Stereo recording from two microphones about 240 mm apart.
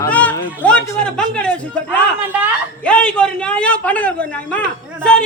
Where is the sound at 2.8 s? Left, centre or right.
Centre.